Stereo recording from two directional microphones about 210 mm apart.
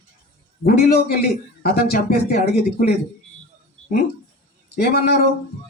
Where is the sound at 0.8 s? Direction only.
45° left (ahead or behind).